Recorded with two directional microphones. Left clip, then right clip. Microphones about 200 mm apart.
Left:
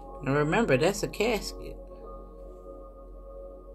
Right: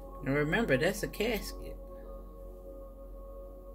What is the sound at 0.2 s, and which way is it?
Speech, 20° right (ahead or behind).